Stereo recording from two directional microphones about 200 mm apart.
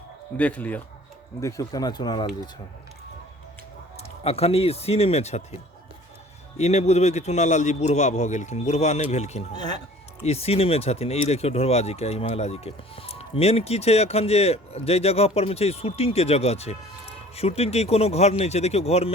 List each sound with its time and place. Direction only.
0.3 s speech: 5° left (ahead or behind)
3.9 s speech: 30° left (ahead or behind)
6.6 s speech: 35° left (ahead or behind)
9.5 s speech: 20° left (ahead or behind)
10.2 s speech: 30° left (ahead or behind)